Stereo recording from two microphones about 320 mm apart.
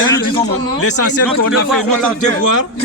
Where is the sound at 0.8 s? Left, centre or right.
Left.